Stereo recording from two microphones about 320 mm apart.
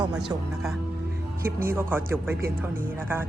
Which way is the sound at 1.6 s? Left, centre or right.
Centre.